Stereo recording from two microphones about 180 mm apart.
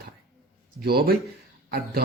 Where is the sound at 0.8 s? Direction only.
60° right (ahead or behind).